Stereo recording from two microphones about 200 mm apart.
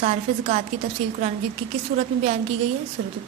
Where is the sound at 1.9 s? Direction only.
35° right (ahead or behind).